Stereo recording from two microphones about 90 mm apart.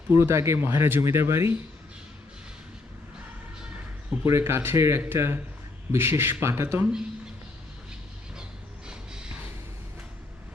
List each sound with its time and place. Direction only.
0.1 s speech: 30° right (ahead or behind)
4.2 s speech: 30° right (ahead or behind)
8.9 s music: 10° right (ahead or behind)